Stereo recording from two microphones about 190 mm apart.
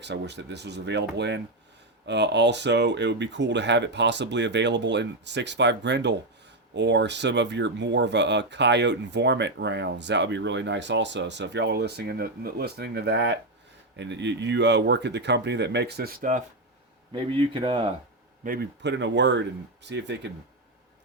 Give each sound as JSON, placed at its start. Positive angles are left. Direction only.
{"t": 0.0, "sound": "speech", "side_deg": -65}
{"t": 17.1, "sound": "speech", "side_deg": -25}
{"t": 18.4, "sound": "speech", "side_deg": -55}